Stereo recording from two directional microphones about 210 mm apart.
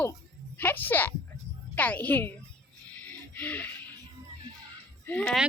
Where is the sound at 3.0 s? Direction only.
5° left (ahead or behind).